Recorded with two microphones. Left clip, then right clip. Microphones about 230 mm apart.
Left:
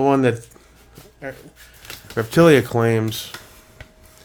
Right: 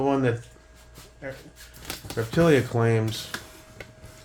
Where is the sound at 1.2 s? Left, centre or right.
Left.